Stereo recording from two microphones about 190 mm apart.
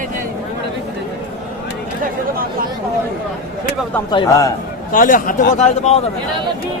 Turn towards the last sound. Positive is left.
turn(degrees=35)  # may be behind; listen again after turning